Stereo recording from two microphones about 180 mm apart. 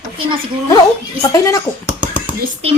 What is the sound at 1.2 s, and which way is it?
Speech, 20° left (ahead or behind).